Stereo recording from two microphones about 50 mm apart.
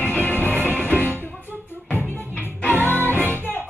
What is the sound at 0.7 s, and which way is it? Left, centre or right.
Music, right.